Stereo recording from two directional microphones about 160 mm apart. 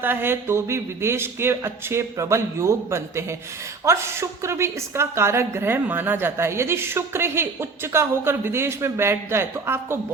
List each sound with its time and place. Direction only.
0.0 s a woman's voice: 15° right (ahead or behind)